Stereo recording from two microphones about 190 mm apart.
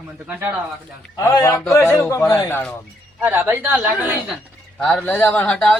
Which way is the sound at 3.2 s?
10° right (ahead or behind).